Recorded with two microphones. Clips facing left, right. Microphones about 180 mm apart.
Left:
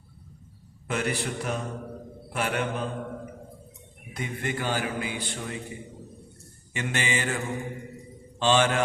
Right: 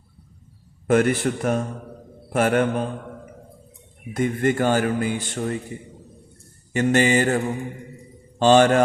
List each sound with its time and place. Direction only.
0.9 s a man's voice: 50° right (ahead or behind)
4.1 s a man's voice: 45° right (ahead or behind)
6.7 s mantra: 40° right (ahead or behind)